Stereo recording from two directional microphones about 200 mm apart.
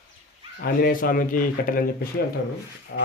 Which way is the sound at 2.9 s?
55° left (ahead or behind).